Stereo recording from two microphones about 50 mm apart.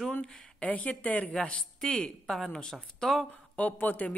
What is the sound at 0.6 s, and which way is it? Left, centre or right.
Speech, left.